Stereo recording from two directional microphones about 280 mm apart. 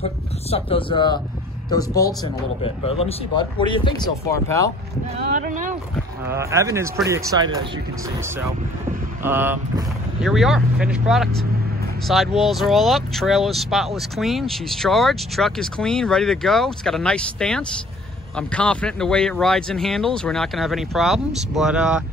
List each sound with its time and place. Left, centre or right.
0.0 s speech: left
5.3 s speech: right
6.2 s speech: centre
9.2 s speech: centre